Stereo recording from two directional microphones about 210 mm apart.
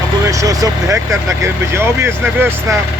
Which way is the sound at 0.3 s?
15° right (ahead or behind).